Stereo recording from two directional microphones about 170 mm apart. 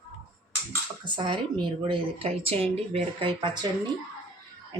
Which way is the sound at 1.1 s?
30° right (ahead or behind).